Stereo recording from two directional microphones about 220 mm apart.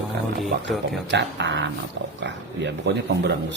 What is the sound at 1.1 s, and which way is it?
Speech, 55° right (ahead or behind).